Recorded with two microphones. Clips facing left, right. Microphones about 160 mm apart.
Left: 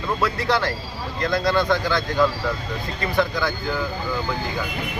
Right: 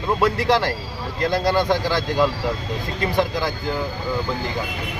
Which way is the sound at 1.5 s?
35° right (ahead or behind).